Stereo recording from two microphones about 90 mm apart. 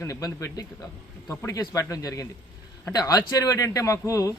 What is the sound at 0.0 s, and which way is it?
Speech, 40° left (ahead or behind).